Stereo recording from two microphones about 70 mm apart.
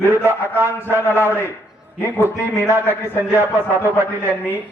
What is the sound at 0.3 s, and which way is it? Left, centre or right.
Speech, right.